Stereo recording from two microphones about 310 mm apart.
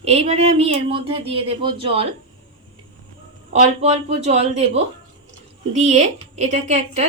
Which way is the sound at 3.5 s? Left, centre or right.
Right.